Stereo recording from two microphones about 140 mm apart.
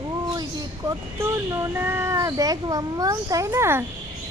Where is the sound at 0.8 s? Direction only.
20° right (ahead or behind).